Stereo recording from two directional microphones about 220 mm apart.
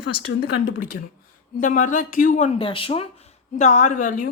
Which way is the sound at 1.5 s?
35° left (ahead or behind).